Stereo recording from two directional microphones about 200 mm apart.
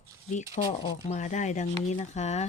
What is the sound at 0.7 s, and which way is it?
Speech, 35° left (ahead or behind).